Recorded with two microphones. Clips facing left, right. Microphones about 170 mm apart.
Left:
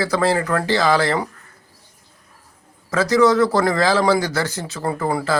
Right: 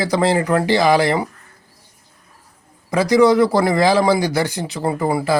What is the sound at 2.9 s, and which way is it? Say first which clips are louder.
Speech: right 2 dB; 15° right (ahead or behind).